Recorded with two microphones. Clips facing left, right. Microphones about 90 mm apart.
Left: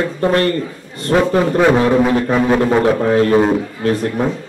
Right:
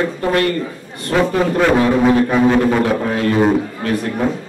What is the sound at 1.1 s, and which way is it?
Speech, 25° left (ahead or behind).